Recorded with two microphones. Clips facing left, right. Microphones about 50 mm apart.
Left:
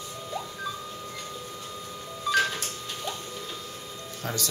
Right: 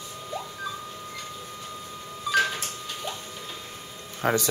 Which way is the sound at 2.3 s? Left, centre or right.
Centre.